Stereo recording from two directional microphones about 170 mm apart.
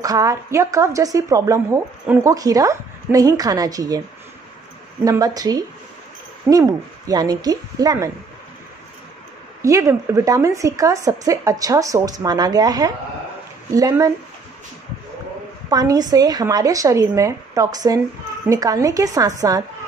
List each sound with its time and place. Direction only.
0.0 s a woman's voice: 20° right (ahead or behind)
5.0 s a woman's voice: 20° right (ahead or behind)
6.5 s a woman's voice: 10° right (ahead or behind)
9.6 s a woman's voice: 15° right (ahead or behind)
15.7 s a woman's voice: 20° right (ahead or behind)